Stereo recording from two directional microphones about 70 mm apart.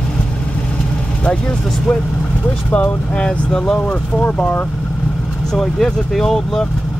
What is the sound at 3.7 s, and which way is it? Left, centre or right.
Speech, left.